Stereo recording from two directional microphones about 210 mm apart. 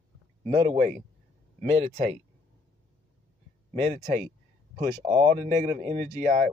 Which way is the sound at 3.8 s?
35° right (ahead or behind).